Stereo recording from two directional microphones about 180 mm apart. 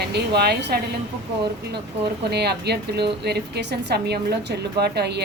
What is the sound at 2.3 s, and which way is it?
A woman's voice, 65° right (ahead or behind).